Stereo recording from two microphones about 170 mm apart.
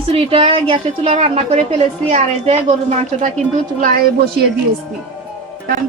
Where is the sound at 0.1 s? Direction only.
35° right (ahead or behind).